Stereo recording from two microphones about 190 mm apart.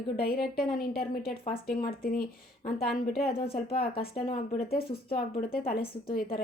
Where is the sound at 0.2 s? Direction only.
55° left (ahead or behind).